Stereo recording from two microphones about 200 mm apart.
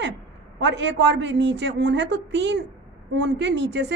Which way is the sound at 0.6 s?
60° right (ahead or behind).